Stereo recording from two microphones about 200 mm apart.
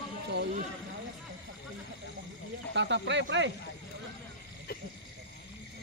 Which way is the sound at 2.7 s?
65° right (ahead or behind).